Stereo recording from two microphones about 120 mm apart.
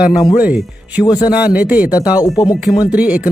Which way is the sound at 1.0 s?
35° left (ahead or behind).